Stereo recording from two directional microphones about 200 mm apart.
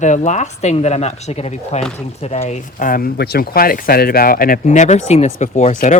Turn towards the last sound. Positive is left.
turn(degrees=35)  # may be behind; listen again after turning